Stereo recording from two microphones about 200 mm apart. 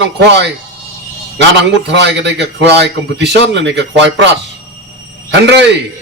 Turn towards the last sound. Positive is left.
turn(degrees=-60)  # may be behind; listen again after turning